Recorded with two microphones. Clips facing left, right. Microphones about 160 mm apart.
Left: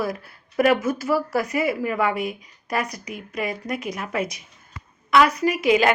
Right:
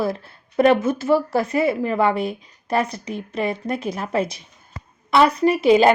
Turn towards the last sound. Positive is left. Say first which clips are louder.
# right 5 dB
turn(degrees=-30)  # may be behind; listen again after turning